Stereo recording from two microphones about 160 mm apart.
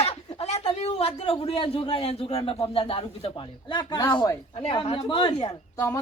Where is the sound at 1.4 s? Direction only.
35° left (ahead or behind).